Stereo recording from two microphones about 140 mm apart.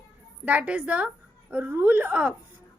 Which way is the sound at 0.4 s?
10° right (ahead or behind).